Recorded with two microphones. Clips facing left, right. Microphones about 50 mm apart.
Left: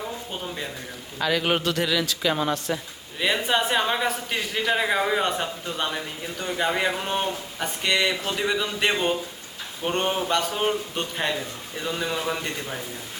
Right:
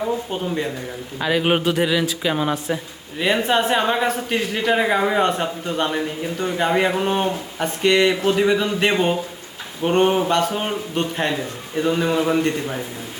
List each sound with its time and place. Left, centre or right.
0.3 s a man's voice: centre